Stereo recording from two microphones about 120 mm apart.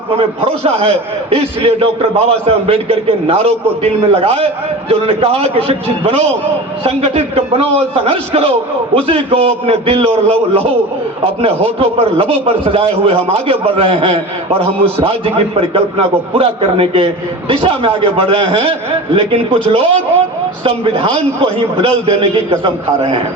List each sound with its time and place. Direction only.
0.2 s a man's voice: 55° right (ahead or behind)